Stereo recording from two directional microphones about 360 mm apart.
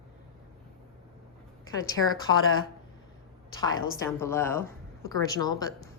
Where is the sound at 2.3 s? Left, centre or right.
Right.